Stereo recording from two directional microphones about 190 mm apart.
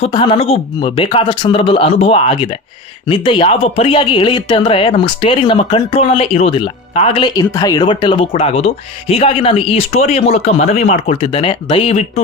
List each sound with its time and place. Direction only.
0.0 s speech: 25° left (ahead or behind)